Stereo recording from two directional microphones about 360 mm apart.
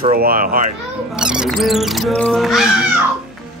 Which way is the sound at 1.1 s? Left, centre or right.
Centre.